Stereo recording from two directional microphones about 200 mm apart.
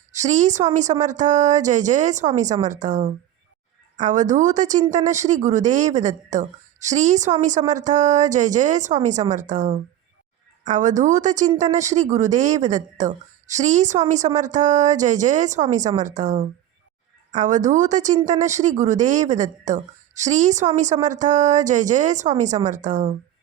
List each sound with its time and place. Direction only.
0.1 s speech: 35° right (ahead or behind)